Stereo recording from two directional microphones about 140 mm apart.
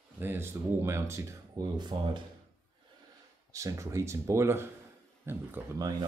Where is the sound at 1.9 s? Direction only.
35° right (ahead or behind).